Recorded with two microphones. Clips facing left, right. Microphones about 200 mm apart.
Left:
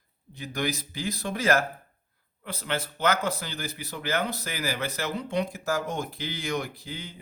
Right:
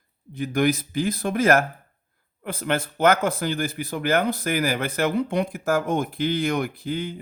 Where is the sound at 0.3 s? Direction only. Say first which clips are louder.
Right 9 dB; 55° right (ahead or behind).